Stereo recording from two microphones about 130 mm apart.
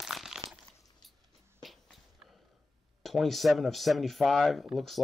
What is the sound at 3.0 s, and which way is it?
Speech, centre (ahead or behind).